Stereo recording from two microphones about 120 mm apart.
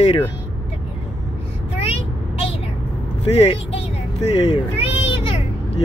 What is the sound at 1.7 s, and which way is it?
Vehicle, 55° left (ahead or behind).